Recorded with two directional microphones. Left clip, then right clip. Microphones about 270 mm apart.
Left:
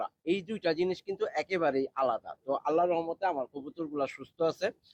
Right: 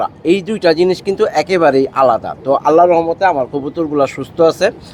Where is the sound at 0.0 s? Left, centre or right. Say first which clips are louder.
Right 18 dB; left.